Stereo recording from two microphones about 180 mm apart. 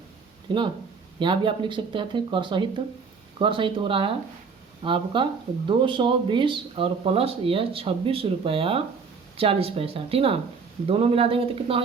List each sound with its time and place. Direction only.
0.5 s speech: 25° right (ahead or behind)